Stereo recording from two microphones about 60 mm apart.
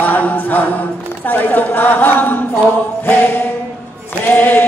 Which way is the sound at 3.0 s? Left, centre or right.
Left.